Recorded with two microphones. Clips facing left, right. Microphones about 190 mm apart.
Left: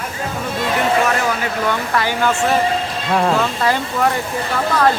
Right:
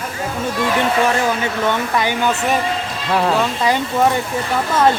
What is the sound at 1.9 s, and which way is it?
Speech, 20° right (ahead or behind).